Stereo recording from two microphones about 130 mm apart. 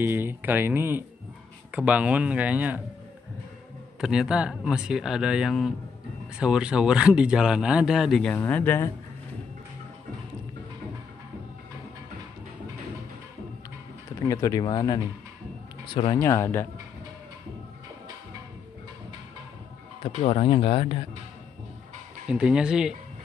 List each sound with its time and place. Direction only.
0.0 s speech: 15° right (ahead or behind)
4.0 s speech: 5° right (ahead or behind)
8.3 s speech: 10° left (ahead or behind)
14.0 s speech: 25° left (ahead or behind)
16.2 s speech: 20° left (ahead or behind)
20.0 s speech: 55° left (ahead or behind)
22.3 s speech: 5° right (ahead or behind)